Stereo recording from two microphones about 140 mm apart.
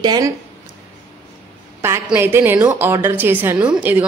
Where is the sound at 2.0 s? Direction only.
15° right (ahead or behind).